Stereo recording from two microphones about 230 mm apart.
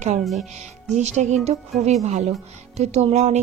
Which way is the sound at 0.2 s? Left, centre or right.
Centre.